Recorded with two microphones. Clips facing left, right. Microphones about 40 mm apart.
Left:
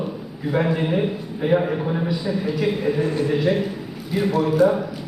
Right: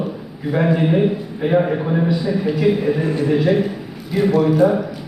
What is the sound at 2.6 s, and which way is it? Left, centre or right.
A man's voice, centre.